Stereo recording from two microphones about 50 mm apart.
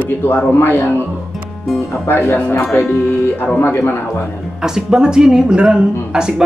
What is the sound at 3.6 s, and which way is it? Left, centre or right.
Speech, left.